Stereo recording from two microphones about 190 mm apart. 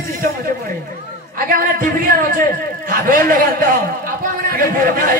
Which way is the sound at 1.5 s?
45° right (ahead or behind).